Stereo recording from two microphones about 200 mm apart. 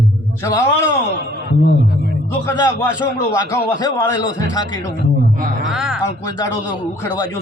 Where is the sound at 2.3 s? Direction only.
15° left (ahead or behind).